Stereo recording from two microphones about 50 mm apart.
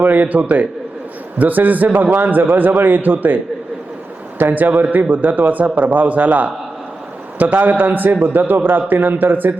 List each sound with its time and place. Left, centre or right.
0.0 s a man's voice: right